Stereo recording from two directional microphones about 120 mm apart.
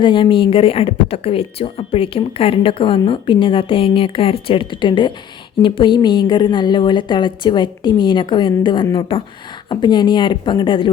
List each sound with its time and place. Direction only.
0.0 s a woman's voice: 45° left (ahead or behind)